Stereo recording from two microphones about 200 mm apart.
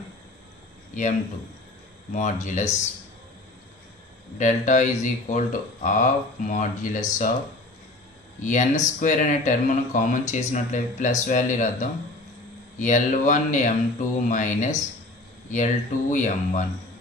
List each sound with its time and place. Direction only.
0.9 s a man's voice: 40° left (ahead or behind)
2.1 s speech: 40° left (ahead or behind)
4.4 s speech: 35° left (ahead or behind)
8.4 s speech: 40° left (ahead or behind)